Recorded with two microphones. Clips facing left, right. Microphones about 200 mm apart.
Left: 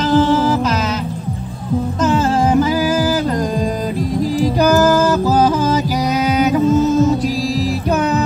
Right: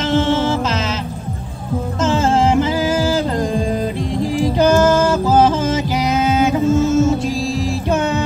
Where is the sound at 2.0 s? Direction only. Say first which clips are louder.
Right 1 dB; 25° right (ahead or behind).